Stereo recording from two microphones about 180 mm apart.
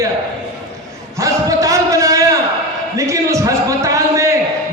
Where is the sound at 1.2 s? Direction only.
20° right (ahead or behind).